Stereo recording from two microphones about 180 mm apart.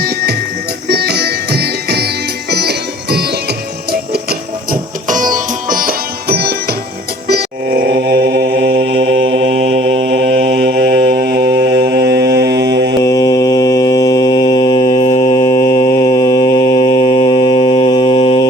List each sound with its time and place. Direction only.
0.9 s music: 65° right (ahead or behind)
3.9 s sitar: 60° right (ahead or behind)
7.3 s music: 65° right (ahead or behind)
13.0 s mantra: 20° left (ahead or behind)